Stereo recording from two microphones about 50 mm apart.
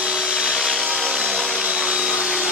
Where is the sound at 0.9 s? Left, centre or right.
Centre.